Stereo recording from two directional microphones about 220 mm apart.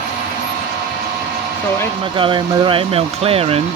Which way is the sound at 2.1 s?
25° right (ahead or behind).